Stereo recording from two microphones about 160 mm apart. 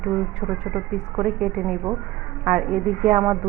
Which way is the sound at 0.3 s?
5° right (ahead or behind).